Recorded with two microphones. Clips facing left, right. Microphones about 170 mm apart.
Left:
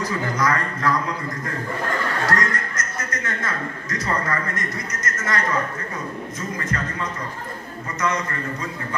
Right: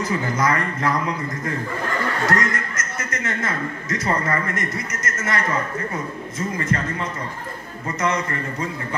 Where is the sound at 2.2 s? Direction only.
25° right (ahead or behind).